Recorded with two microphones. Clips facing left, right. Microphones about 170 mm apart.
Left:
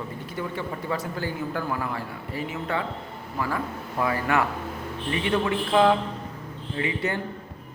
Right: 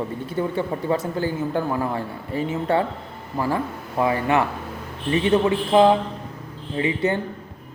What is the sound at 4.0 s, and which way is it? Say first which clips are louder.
A man's voice: right 4 dB; 20° right (ahead or behind).